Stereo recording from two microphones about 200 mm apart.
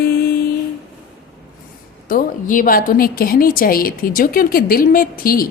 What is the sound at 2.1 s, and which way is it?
Mantra, 45° left (ahead or behind).